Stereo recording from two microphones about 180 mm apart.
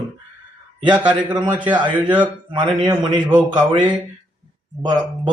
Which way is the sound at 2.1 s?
25° right (ahead or behind).